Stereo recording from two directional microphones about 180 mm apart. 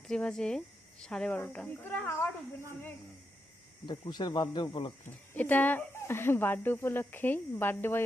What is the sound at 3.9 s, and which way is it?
Speech, 25° left (ahead or behind).